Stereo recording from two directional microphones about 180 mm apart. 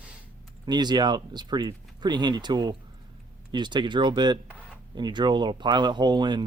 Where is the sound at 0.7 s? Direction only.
25° right (ahead or behind).